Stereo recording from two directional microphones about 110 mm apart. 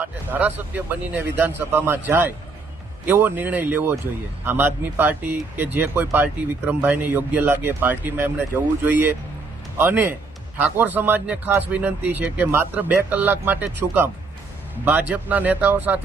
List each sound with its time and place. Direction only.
0.0 s speech: 15° right (ahead or behind)